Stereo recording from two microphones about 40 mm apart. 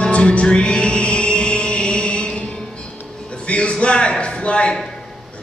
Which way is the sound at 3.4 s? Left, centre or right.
Left.